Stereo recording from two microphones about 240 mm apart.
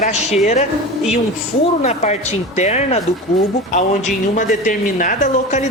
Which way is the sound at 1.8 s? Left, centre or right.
Left.